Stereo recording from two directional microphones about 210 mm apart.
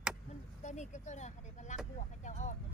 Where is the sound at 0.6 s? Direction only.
35° left (ahead or behind).